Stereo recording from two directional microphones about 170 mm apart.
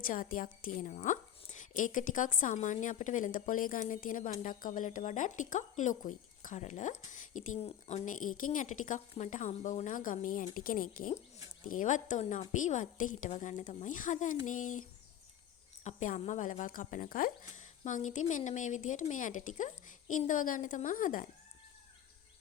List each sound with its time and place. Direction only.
0.0 s a woman's voice: 55° left (ahead or behind)
15.8 s a woman's voice: 45° left (ahead or behind)